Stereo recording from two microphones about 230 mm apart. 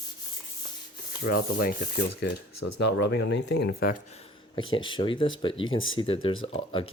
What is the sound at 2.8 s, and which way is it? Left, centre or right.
Speech, left.